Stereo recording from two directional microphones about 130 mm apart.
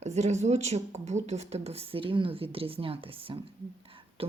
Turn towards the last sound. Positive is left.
turn(degrees=-45)  # may be behind; listen again after turning